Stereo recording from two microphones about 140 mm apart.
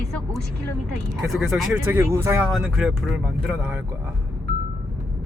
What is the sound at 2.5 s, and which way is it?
Speech, 5° right (ahead or behind).